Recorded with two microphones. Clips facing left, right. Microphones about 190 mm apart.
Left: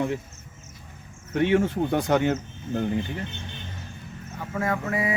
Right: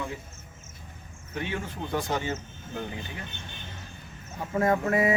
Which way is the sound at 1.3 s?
70° left (ahead or behind).